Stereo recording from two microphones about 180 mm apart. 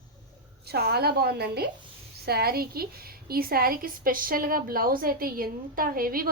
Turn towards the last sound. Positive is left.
turn(degrees=-55)  # may be behind; listen again after turning